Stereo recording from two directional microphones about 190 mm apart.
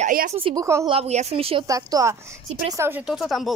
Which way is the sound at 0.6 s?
15° right (ahead or behind).